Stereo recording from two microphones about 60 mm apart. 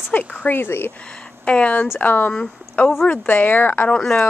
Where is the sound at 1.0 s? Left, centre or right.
Centre.